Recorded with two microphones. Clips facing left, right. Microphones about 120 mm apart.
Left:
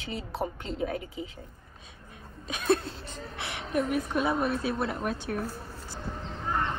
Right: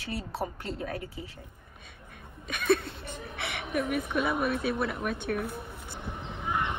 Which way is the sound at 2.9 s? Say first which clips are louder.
Even; 60° right (ahead or behind).